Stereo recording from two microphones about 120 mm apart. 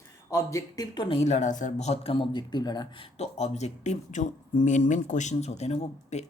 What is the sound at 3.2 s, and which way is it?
Speech, 65° left (ahead or behind).